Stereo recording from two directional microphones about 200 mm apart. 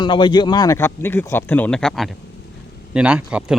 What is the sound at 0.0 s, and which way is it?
Speech, 25° left (ahead or behind).